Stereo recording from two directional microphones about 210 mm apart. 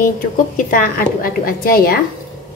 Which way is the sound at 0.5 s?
40° left (ahead or behind).